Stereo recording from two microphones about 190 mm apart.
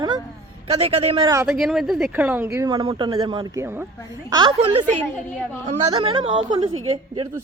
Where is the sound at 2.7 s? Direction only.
25° right (ahead or behind).